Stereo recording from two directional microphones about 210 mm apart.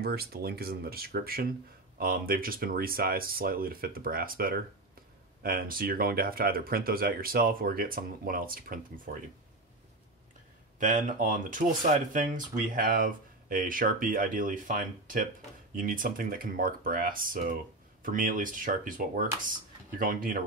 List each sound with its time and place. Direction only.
0.0 s speech: 50° right (ahead or behind)
10.8 s speech: 40° right (ahead or behind)